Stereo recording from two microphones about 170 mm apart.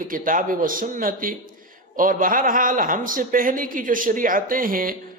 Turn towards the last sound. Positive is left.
turn(degrees=-55)  # may be behind; listen again after turning